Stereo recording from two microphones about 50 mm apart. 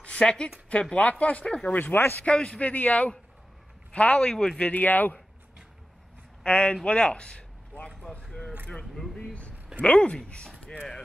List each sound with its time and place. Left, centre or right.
0.0 s a sound: left
0.9 s speech: left
1.4 s speech: centre
1.7 s speech: left
2.1 s speech: left
2.7 s speech: left
4.6 s speech: left
6.4 s speech: left
8.3 s a sound: centre
9.8 s speech: left